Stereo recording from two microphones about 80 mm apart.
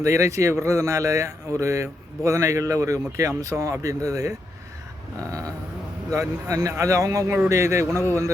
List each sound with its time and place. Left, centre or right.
0.0 s speech: right
6.1 s speech: right